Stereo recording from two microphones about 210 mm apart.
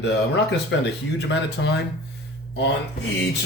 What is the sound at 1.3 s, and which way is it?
Speech, 55° left (ahead or behind).